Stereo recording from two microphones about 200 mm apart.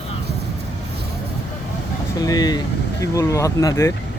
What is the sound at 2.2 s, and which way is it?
Speech, 20° left (ahead or behind).